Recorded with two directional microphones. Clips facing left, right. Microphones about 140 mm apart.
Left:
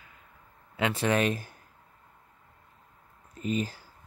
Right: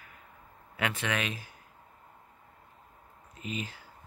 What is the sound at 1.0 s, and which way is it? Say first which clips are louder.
Speech: left 7 dB; 40° left (ahead or behind).